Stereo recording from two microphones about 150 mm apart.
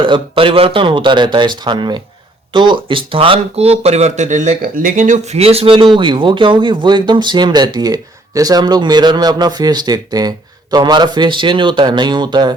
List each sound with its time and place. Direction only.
0.0 s speech: 35° right (ahead or behind)